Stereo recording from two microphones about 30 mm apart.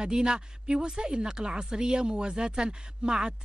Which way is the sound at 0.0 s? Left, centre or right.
Right.